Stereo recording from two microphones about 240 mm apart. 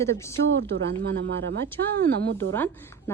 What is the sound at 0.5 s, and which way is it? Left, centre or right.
A woman's voice, right.